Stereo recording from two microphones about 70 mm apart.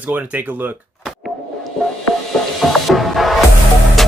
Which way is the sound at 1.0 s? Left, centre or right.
Centre.